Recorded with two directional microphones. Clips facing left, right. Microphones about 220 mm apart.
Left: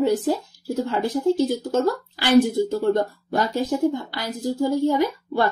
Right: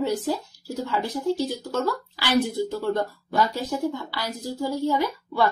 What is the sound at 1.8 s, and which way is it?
Speech, 50° left (ahead or behind).